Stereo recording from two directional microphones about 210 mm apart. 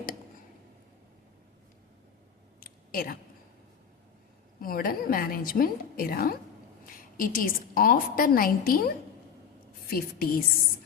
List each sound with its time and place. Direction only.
2.6 s a sound: 45° left (ahead or behind)
4.6 s a woman's voice: 45° left (ahead or behind)
9.9 s a woman's voice: 45° left (ahead or behind)